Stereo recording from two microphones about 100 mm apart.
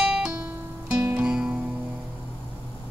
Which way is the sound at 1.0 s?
10° right (ahead or behind).